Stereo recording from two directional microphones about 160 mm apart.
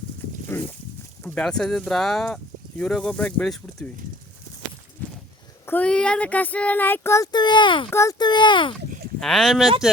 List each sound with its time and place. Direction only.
0.5 s speech: 15° left (ahead or behind)
5.0 s walk: 10° left (ahead or behind)
5.6 s speech: 10° left (ahead or behind); by 7.9 s 30° left (ahead or behind)
7.9 s speech: 20° left (ahead or behind)
9.2 s speech: centre (ahead or behind)